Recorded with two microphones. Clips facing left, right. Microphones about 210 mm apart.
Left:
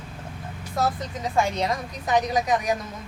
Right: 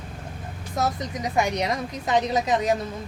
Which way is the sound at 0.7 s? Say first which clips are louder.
Even; 20° right (ahead or behind).